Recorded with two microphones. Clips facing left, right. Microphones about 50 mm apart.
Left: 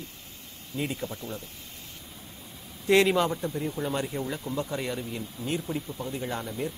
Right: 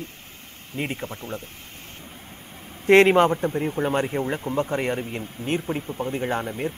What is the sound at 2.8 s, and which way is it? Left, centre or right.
Speech, right.